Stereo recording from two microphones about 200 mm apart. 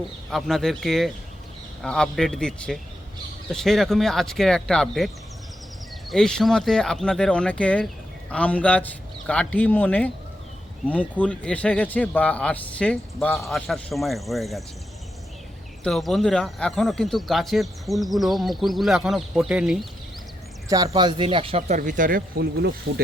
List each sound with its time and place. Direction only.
0.3 s speech: centre (ahead or behind)
15.8 s speech: centre (ahead or behind)
20.7 s speech: 15° right (ahead or behind)
21.8 s speech: 40° right (ahead or behind)